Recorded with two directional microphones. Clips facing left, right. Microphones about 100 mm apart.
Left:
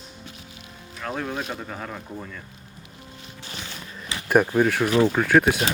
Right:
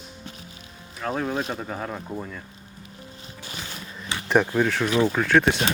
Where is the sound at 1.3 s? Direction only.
25° right (ahead or behind).